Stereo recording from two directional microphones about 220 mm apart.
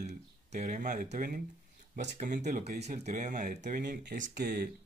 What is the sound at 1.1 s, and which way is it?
Speech, 40° right (ahead or behind).